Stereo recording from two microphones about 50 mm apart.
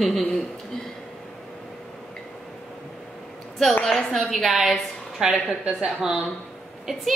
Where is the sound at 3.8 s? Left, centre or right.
Centre.